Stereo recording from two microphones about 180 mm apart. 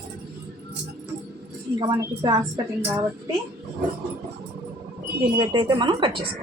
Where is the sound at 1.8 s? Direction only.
25° right (ahead or behind).